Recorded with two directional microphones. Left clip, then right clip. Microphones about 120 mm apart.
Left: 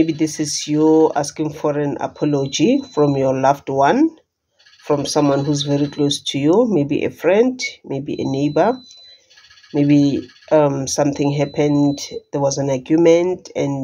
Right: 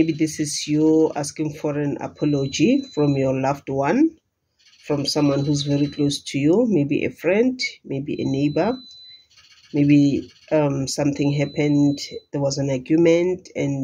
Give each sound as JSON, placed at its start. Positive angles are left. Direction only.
{"t": 0.0, "sound": "speech", "side_deg": -30}
{"t": 0.8, "sound": "speech", "side_deg": -5}
{"t": 1.1, "sound": "speech", "side_deg": -35}
{"t": 5.1, "sound": "speech", "side_deg": -30}
{"t": 6.0, "sound": "speech", "side_deg": 55}
{"t": 6.3, "sound": "speech", "side_deg": -30}